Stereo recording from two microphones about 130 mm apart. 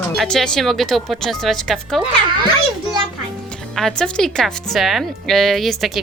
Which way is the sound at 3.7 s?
5° left (ahead or behind).